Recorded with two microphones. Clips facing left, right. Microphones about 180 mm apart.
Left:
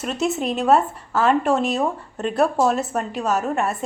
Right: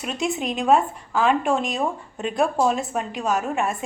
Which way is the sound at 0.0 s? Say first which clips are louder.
Left 3 dB; centre (ahead or behind).